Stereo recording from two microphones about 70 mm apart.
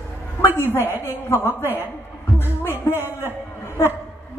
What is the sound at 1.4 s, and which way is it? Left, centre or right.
Speech, left.